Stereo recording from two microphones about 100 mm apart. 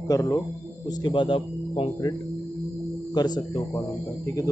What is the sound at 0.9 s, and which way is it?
Speech, 50° left (ahead or behind).